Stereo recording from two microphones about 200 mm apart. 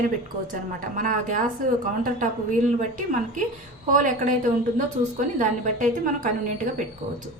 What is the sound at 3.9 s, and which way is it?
A woman's voice, 40° right (ahead or behind).